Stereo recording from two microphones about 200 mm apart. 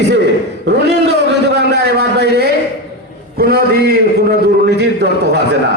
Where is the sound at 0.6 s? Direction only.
55° right (ahead or behind).